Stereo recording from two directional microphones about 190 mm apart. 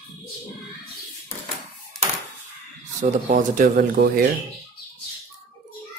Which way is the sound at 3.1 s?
45° right (ahead or behind).